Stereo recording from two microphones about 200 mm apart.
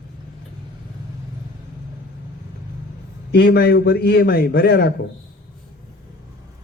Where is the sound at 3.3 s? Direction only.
55° left (ahead or behind).